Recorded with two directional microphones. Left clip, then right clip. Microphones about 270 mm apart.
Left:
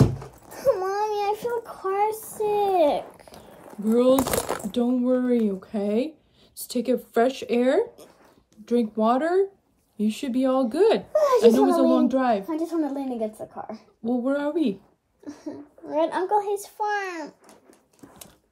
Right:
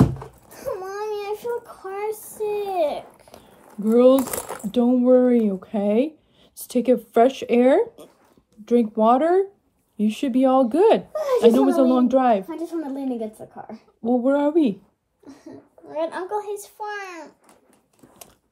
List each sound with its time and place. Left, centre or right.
0.5 s a sound: left
3.8 s speech: centre
4.2 s speech: left
4.6 s speech: centre
12.4 s a woman's voice: centre
14.0 s speech: centre
15.9 s a child's voice: left